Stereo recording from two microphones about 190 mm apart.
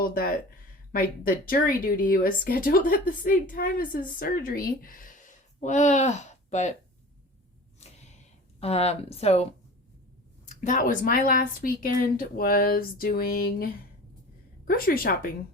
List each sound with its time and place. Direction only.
0.0 s speech: 50° left (ahead or behind)
7.8 s a sound: 35° left (ahead or behind)
8.6 s speech: 35° left (ahead or behind); by 15.3 s 50° left (ahead or behind)